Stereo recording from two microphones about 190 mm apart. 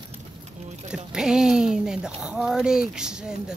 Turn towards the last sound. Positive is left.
turn(degrees=-5)  # may be behind; listen again after turning